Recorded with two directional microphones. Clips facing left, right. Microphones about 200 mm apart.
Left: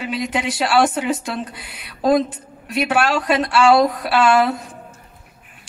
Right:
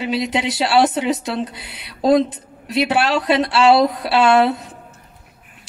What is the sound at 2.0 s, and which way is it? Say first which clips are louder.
A woman's voice: right 2 dB; 25° right (ahead or behind).